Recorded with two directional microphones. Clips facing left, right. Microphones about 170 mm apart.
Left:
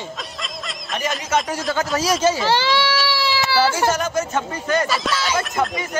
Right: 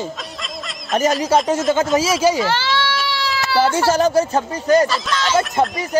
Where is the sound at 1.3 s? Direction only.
35° right (ahead or behind).